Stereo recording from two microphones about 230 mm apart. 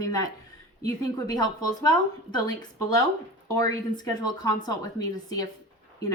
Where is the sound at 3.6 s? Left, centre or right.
Centre.